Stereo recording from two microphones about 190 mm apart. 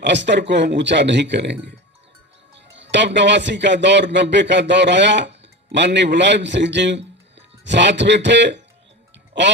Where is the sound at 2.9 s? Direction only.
70° right (ahead or behind).